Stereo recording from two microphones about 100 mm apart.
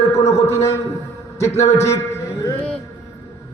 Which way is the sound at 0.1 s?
30° left (ahead or behind).